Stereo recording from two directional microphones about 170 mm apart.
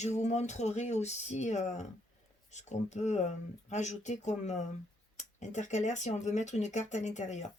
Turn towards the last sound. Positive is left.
turn(degrees=45)  # may be behind; listen again after turning